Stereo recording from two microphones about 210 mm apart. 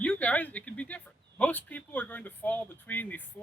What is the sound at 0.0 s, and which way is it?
Speech, 5° left (ahead or behind).